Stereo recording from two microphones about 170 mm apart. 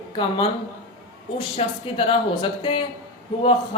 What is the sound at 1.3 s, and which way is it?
Speech, 30° left (ahead or behind).